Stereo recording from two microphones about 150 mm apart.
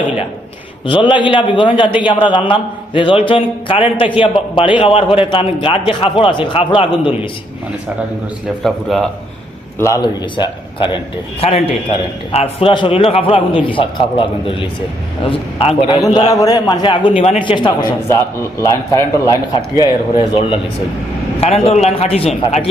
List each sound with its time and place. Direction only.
0.9 s a man's voice: 35° left (ahead or behind)
8.6 s speech: centre (ahead or behind)
9.7 s a man's voice: 20° left (ahead or behind)
10.0 s a man's voice: 30° left (ahead or behind)
16.3 s a man's voice: 25° left (ahead or behind)
18.1 s a man's voice: 20° left (ahead or behind)
19.8 s a man's voice: 35° left (ahead or behind)